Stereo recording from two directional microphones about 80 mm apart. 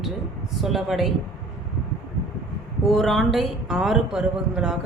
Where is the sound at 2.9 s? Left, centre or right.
Centre.